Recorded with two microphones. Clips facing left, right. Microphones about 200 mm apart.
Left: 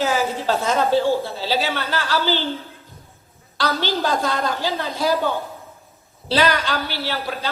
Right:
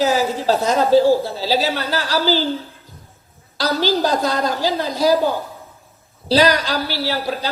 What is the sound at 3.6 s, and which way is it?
A woman's voice, 40° right (ahead or behind).